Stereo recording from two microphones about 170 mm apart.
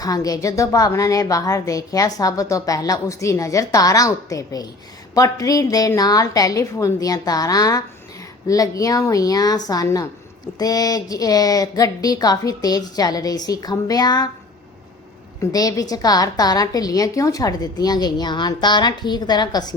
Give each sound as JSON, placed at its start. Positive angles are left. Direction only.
{"t": 0.0, "sound": "a woman's voice", "side_deg": 20}
{"t": 15.4, "sound": "a woman's voice", "side_deg": 20}